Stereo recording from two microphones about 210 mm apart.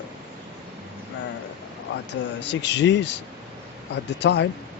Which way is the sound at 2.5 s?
55° left (ahead or behind).